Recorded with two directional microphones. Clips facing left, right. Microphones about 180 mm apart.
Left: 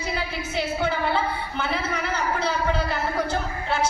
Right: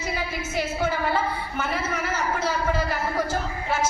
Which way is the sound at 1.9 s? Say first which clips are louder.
Even; 5° right (ahead or behind).